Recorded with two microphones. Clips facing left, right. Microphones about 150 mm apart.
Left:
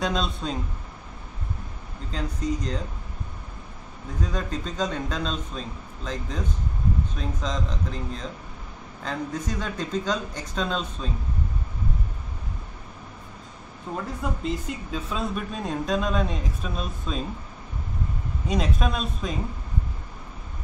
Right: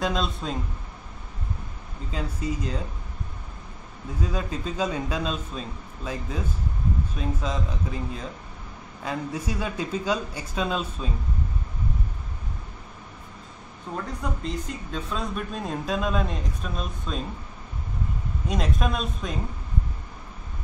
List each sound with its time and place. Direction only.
0.0 s speech: centre (ahead or behind)
2.0 s speech: 5° right (ahead or behind)
4.2 s a man's voice: 5° right (ahead or behind)
13.9 s speech: centre (ahead or behind)
18.5 s speech: centre (ahead or behind)